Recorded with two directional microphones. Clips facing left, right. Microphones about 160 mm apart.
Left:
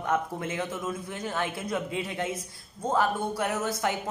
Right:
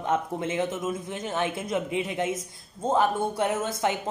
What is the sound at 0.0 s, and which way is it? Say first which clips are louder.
A man's voice: right 2 dB; 20° right (ahead or behind).